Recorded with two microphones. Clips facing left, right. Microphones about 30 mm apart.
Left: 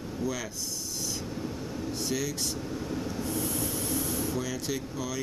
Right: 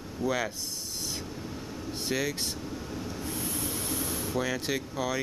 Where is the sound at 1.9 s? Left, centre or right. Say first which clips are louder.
Right 2 dB; right.